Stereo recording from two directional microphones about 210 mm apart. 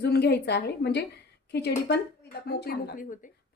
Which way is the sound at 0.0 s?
50° left (ahead or behind).